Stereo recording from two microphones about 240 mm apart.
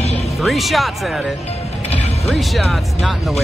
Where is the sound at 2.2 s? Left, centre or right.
Centre.